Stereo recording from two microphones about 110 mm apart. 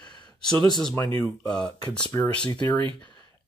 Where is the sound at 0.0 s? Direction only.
40° left (ahead or behind).